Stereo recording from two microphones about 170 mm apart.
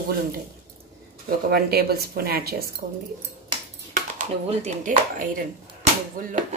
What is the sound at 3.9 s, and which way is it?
Speech, 45° right (ahead or behind).